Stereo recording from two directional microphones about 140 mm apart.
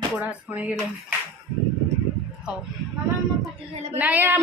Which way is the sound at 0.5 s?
10° right (ahead or behind).